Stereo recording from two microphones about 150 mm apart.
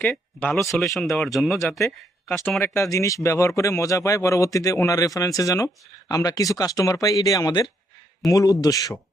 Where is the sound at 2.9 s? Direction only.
20° left (ahead or behind).